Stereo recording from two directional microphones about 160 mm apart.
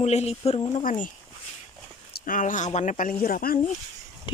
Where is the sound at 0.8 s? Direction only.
55° left (ahead or behind).